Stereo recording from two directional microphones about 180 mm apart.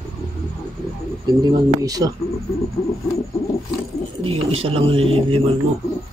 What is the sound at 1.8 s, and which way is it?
Speech, 20° right (ahead or behind).